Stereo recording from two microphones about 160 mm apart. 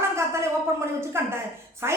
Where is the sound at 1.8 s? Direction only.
15° right (ahead or behind).